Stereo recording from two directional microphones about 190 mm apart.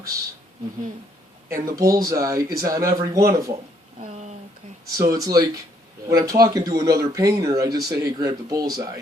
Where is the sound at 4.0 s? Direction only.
40° right (ahead or behind).